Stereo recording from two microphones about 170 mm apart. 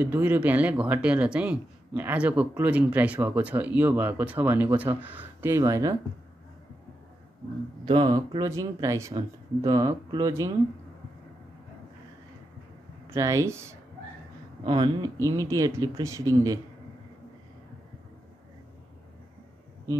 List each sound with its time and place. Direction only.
0.0 s speech: 10° right (ahead or behind)
7.8 s speech: 25° right (ahead or behind)
13.1 s speech: 20° right (ahead or behind)